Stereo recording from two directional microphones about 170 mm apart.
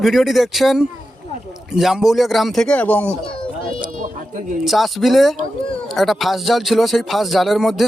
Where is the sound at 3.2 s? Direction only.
30° left (ahead or behind).